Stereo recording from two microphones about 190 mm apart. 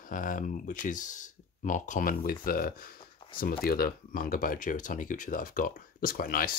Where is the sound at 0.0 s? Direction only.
45° left (ahead or behind).